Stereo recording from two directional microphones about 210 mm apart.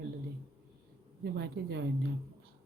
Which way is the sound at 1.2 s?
50° right (ahead or behind).